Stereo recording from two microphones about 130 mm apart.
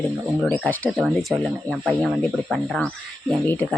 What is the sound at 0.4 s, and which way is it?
Speech, 10° left (ahead or behind).